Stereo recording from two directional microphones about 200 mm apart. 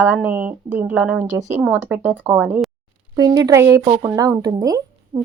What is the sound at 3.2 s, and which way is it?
A woman's voice, 20° right (ahead or behind).